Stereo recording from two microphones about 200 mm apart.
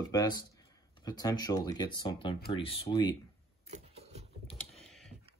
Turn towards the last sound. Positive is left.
turn(degrees=0)  # may be behind; listen again after turning